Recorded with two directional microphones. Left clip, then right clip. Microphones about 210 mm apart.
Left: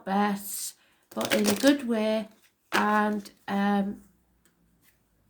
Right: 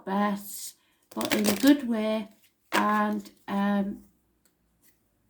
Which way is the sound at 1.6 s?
35° left (ahead or behind).